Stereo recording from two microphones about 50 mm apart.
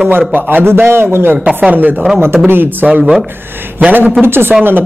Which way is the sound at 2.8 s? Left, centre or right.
Centre.